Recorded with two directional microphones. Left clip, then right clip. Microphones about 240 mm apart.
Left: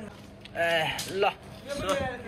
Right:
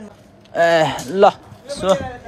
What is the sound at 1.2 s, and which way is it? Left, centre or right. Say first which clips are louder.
Speech: right 16 dB; right.